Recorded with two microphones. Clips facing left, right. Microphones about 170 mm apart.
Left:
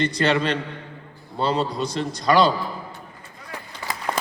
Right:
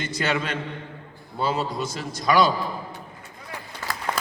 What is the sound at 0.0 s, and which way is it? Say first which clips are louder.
A man's voice: left 5 dB; 5° right (ahead or behind).